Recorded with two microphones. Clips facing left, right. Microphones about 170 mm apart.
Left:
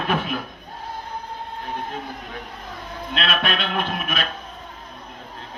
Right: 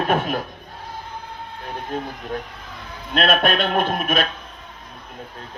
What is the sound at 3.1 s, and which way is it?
Speech, 45° right (ahead or behind).